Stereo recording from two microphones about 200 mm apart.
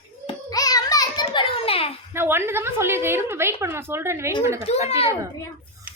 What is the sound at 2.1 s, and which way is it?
A woman's voice, 10° right (ahead or behind).